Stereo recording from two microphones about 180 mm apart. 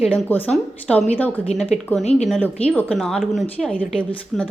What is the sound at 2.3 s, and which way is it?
A woman's voice, 5° left (ahead or behind).